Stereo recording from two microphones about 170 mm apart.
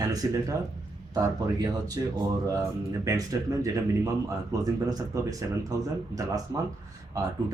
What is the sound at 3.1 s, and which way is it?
Speech, 20° right (ahead or behind).